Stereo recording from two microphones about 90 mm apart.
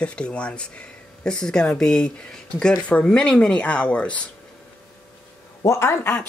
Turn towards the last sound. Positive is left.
turn(degrees=25)  # may be behind; listen again after turning